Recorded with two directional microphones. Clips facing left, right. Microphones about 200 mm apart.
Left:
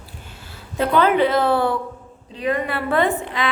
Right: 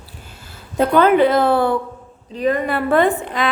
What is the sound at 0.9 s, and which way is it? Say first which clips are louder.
A woman's voice: right 3 dB; 50° right (ahead or behind).